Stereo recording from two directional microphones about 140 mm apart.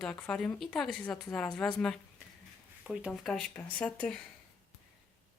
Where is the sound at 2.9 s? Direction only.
Centre (ahead or behind).